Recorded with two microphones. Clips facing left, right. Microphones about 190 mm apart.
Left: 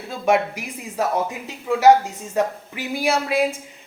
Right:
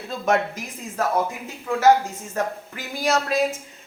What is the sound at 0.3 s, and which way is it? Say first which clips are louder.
Speech: left 3 dB; 10° left (ahead or behind).